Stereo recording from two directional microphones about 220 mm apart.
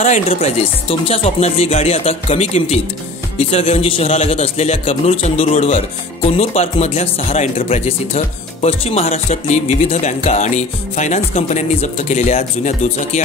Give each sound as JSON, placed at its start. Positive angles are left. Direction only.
{"t": 0.0, "sound": "a man's voice", "side_deg": 30}